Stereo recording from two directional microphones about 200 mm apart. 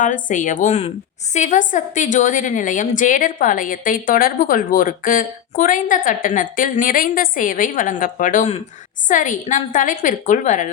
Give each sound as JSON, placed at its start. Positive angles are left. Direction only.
{"t": 0.0, "sound": "a woman's voice", "side_deg": 40}